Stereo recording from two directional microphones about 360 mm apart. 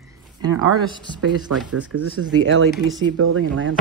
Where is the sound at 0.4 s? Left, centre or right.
Centre.